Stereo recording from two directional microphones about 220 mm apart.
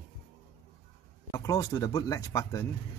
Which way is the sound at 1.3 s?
15° left (ahead or behind).